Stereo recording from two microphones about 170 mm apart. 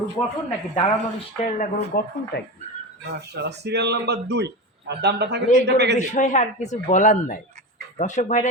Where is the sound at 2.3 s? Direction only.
65° left (ahead or behind).